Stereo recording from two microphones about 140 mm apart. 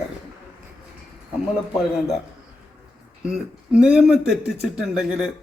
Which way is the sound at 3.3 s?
5° right (ahead or behind).